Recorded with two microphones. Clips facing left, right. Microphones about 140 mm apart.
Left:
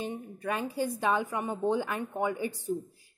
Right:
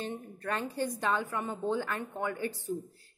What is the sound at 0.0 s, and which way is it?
A woman's voice, 10° left (ahead or behind).